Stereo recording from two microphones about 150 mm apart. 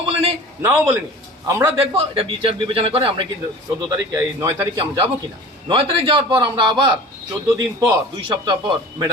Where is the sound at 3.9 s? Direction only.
20° right (ahead or behind).